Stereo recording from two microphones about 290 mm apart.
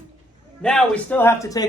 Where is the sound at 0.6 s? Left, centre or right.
Centre.